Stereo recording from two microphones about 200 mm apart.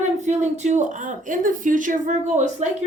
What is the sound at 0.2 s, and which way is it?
A woman's voice, 35° right (ahead or behind).